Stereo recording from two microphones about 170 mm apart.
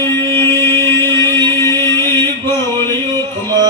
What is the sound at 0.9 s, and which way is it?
Music, 25° right (ahead or behind).